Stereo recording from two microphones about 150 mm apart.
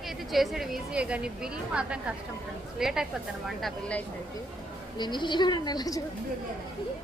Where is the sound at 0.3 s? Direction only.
Centre (ahead or behind).